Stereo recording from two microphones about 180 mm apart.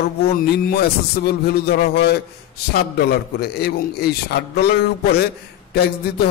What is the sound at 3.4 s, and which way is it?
A man's voice, 60° left (ahead or behind).